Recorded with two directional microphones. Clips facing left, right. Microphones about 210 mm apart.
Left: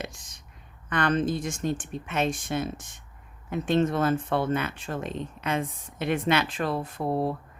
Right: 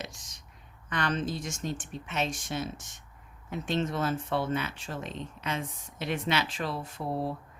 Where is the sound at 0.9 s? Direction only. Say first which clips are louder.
Left 6 dB; 55° left (ahead or behind).